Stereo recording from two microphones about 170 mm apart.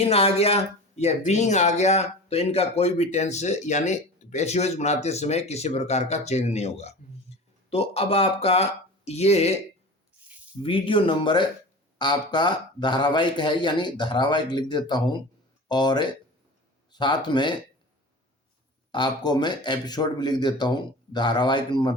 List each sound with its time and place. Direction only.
0.0 s speech: 35° left (ahead or behind)
7.3 s a sound: 40° left (ahead or behind)
7.7 s speech: 35° left (ahead or behind)
10.6 s speech: 30° left (ahead or behind)
18.9 s speech: 25° left (ahead or behind)